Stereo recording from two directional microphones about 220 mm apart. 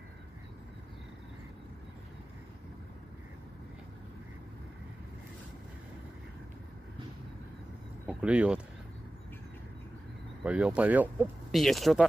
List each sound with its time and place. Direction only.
8.1 s speech: 5° right (ahead or behind)
10.4 s speech: 5° right (ahead or behind)